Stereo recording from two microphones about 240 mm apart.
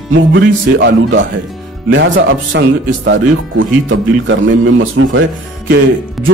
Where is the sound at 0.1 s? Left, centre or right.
Right.